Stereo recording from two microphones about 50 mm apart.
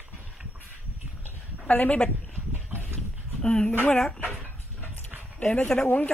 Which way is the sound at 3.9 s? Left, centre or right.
Centre.